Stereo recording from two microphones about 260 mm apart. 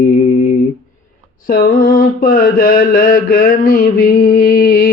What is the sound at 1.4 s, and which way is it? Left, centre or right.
Mantra, left.